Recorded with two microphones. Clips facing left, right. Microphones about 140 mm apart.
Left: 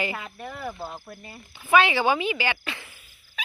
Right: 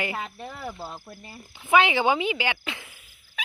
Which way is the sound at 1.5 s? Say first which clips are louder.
Even; 15° right (ahead or behind).